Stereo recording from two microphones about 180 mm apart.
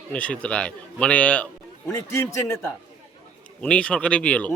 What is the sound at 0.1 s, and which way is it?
A man's voice, 5° left (ahead or behind).